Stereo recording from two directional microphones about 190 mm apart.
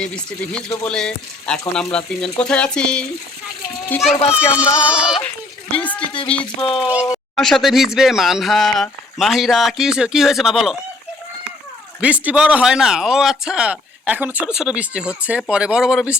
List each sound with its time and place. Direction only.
0.0 s a child's voice: 5° left (ahead or behind)
4.4 s speech: 5° right (ahead or behind)
5.7 s a sound: 10° left (ahead or behind)
6.6 s speech: 25° left (ahead or behind)
7.3 s speech: centre (ahead or behind)
11.9 s speech: 5° right (ahead or behind)